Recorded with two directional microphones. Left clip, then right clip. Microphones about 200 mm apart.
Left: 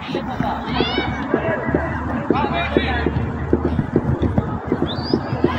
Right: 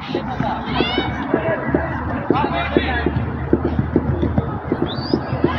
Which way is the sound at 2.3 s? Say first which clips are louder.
Right 1 dB; 35° left (ahead or behind).